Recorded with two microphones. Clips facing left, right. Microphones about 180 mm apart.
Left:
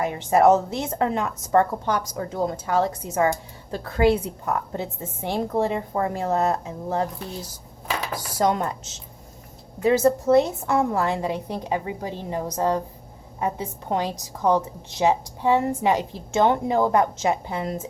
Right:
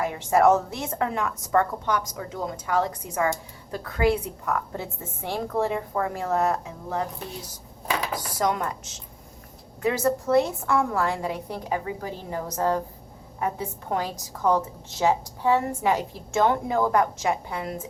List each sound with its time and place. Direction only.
0.0 s a woman's voice: 20° left (ahead or behind)
8.4 s a woman's voice: 30° left (ahead or behind)